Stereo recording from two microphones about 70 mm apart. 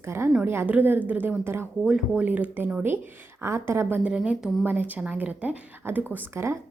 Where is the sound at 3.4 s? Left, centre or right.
Right.